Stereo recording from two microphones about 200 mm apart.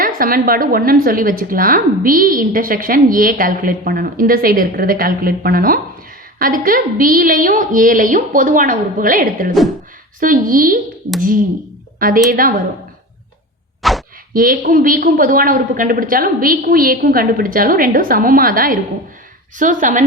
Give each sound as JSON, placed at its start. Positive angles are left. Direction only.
{"t": 0.0, "sound": "a woman's voice", "side_deg": -45}
{"t": 13.8, "sound": "plop", "side_deg": 0}
{"t": 14.3, "sound": "a woman's voice", "side_deg": -45}